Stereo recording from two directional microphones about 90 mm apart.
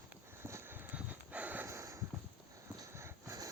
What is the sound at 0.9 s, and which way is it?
Horse, 15° right (ahead or behind).